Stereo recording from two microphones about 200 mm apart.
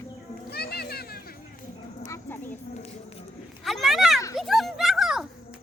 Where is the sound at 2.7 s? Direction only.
35° left (ahead or behind).